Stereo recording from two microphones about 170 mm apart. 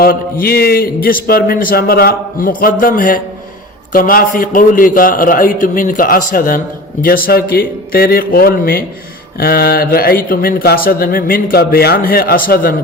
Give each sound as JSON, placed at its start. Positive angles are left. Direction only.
{"t": 0.0, "sound": "a man's voice", "side_deg": 60}